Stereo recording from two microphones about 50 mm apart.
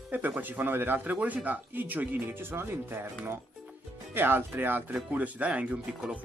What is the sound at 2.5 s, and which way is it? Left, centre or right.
Speech, right.